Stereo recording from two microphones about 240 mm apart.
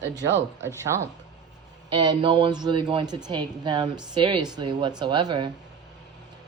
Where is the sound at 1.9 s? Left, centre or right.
Right.